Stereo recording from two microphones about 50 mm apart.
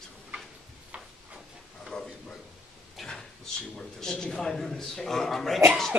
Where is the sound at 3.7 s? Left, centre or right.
Centre.